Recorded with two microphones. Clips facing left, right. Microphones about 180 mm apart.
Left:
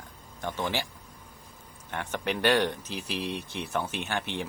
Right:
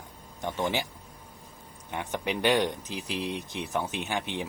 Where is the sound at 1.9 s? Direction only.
15° right (ahead or behind).